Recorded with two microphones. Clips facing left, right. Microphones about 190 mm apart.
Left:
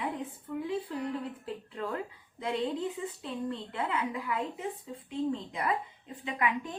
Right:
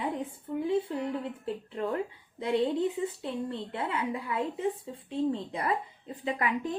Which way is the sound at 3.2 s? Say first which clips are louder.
Right 2 dB; 30° right (ahead or behind).